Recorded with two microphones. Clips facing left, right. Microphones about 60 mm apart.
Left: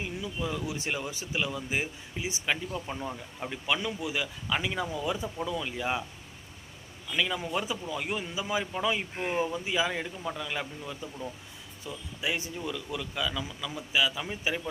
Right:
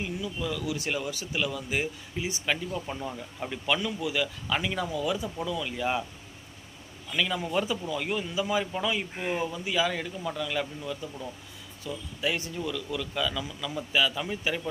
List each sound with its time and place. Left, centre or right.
0.2 s a man's voice: left
2.8 s speech: centre
3.8 s a man's voice: centre
4.4 s speech: centre
4.9 s a man's voice: left
5.6 s speech: centre
7.1 s speech: centre
9.4 s a man's voice: left
13.1 s speech: centre